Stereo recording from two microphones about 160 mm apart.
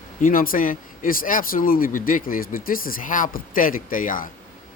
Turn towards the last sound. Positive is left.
turn(degrees=60)  # may be behind; listen again after turning